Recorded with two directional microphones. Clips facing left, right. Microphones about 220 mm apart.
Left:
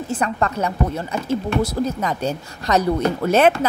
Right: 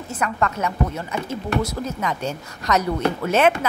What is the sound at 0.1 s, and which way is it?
A woman's voice, 30° left (ahead or behind).